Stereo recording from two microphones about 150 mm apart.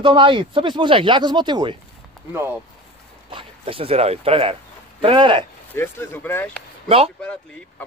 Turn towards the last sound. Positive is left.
turn(degrees=10)  # may be behind; listen again after turning